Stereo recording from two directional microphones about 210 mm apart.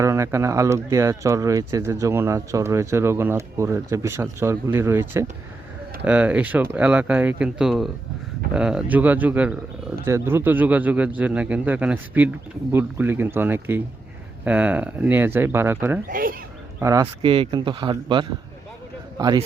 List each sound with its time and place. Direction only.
0.0 s speech: 15° right (ahead or behind)
16.0 s speech: 40° right (ahead or behind)
16.8 s speech: 15° right (ahead or behind)
17.2 s a man's voice: 25° right (ahead or behind)